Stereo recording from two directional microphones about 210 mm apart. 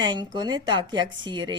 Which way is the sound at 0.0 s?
20° right (ahead or behind).